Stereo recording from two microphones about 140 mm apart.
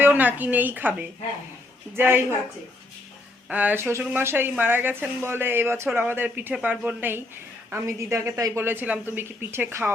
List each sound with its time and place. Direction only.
0.0 s speech: 15° right (ahead or behind)
3.5 s speech: 10° right (ahead or behind)